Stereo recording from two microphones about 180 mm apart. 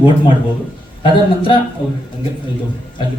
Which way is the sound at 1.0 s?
30° left (ahead or behind).